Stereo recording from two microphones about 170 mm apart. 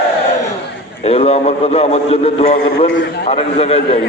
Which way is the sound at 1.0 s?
40° left (ahead or behind).